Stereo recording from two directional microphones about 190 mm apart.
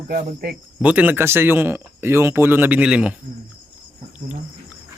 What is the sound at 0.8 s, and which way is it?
Speech, 10° right (ahead or behind).